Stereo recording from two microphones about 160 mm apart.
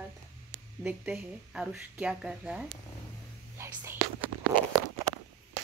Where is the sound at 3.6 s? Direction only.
15° right (ahead or behind).